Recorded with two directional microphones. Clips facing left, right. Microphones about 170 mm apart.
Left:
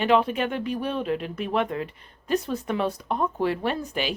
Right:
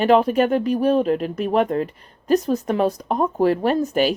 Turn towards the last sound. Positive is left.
turn(degrees=-45)  # may be behind; listen again after turning